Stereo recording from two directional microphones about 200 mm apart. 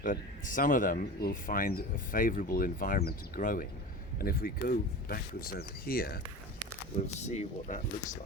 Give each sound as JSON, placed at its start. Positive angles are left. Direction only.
{"t": 0.0, "sound": "speech", "side_deg": 40}
{"t": 7.2, "sound": "speech", "side_deg": 35}